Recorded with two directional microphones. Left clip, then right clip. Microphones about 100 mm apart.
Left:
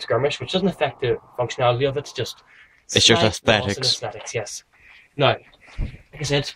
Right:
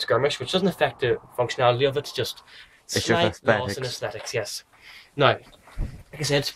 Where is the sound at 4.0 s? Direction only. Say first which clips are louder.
Even; 15° right (ahead or behind).